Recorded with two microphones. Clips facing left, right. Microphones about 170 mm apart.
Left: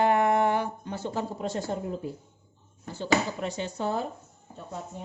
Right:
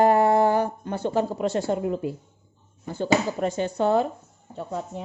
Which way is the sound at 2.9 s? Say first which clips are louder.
Right 4 dB; 50° right (ahead or behind).